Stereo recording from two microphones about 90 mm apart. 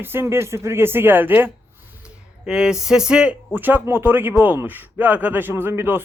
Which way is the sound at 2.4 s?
10° right (ahead or behind).